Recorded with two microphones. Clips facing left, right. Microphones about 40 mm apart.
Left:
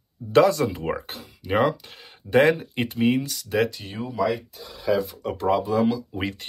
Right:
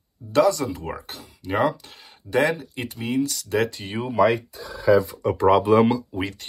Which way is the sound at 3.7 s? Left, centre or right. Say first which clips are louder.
Right 6 dB; right.